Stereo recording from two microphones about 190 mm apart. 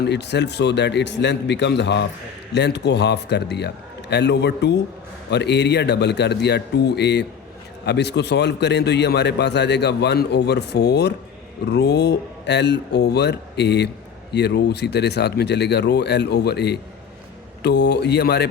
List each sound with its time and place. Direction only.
0.0 s a man's voice: 65° left (ahead or behind)